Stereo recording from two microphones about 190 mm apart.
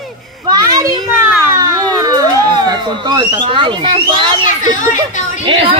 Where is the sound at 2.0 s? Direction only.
20° right (ahead or behind).